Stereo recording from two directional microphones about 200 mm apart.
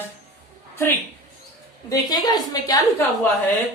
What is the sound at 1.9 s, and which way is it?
Speech, 20° left (ahead or behind).